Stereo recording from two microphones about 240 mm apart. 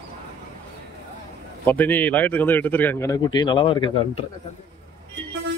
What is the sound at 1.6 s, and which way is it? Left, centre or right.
A man's voice, centre.